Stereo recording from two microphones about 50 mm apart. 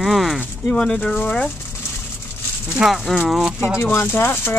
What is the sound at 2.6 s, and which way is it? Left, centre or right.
Speech, centre.